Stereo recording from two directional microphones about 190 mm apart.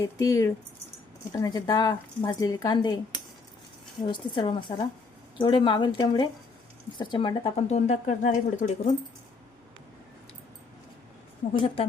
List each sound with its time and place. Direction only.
0.0 s a woman's voice: 15° left (ahead or behind); by 8.9 s 40° left (ahead or behind)
11.6 s a woman's voice: 30° left (ahead or behind)